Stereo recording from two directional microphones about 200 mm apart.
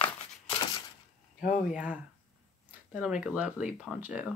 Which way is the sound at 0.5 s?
20° left (ahead or behind).